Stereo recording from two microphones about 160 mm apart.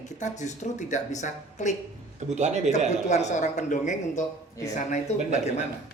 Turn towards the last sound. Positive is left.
turn(degrees=45)  # may be behind; listen again after turning